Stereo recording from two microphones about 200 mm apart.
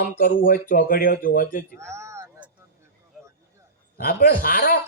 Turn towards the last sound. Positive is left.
turn(degrees=45)  # may be behind; listen again after turning